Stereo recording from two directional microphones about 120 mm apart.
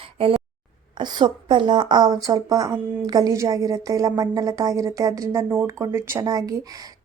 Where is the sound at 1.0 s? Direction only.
40° right (ahead or behind).